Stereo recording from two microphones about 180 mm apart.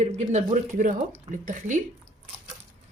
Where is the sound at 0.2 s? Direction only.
40° right (ahead or behind).